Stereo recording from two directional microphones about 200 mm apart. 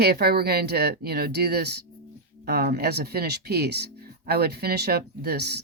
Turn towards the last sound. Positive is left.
turn(degrees=-55)  # may be behind; listen again after turning